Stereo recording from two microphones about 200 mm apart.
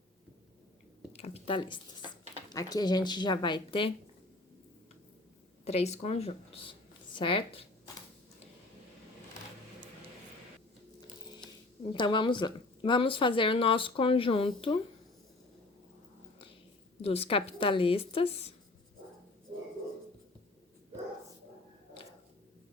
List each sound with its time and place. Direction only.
1.1 s speech: 30° left (ahead or behind)
5.6 s speech: 30° left (ahead or behind)
11.9 s speech: 25° left (ahead or behind)
17.0 s speech: 30° left (ahead or behind)